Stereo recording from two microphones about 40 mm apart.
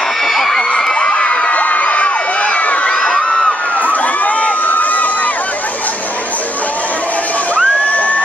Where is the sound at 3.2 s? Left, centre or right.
Centre.